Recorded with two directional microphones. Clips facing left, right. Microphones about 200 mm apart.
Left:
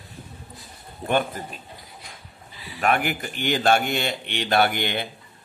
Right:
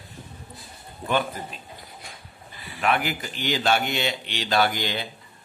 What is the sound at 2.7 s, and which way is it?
Speech, 45° left (ahead or behind).